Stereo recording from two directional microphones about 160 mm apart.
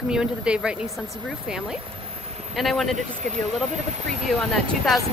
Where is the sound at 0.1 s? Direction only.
5° right (ahead or behind).